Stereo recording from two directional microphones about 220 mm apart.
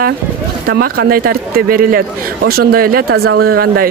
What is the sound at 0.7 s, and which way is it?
Speech, 45° right (ahead or behind).